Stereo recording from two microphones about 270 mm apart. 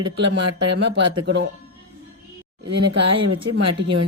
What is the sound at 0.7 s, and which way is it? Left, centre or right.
Speech, right.